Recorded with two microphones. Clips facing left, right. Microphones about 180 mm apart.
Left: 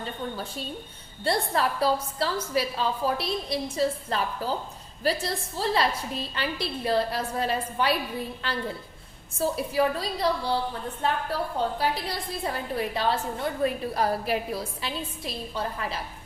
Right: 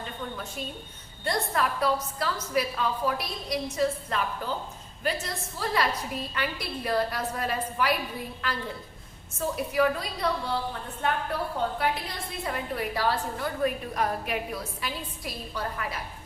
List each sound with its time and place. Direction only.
0.0 s a woman's voice: 35° left (ahead or behind)